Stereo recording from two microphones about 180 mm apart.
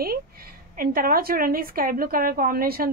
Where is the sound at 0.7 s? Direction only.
55° right (ahead or behind).